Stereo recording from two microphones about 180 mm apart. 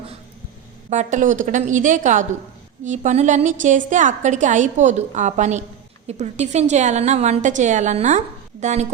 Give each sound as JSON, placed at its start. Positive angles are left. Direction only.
{"t": 0.9, "sound": "a woman's voice", "side_deg": -40}